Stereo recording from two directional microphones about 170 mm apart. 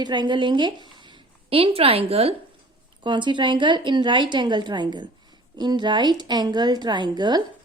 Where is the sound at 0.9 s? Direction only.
25° right (ahead or behind).